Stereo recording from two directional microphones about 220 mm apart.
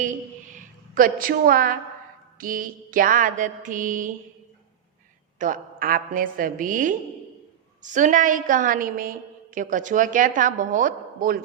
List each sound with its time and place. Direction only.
0.0 s a woman's voice: 35° right (ahead or behind)
5.4 s a woman's voice: 40° right (ahead or behind)